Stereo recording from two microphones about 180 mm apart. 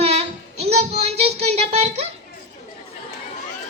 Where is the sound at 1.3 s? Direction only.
35° right (ahead or behind).